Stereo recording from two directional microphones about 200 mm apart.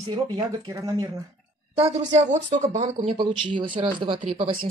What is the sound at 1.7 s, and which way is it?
Speech, 35° right (ahead or behind).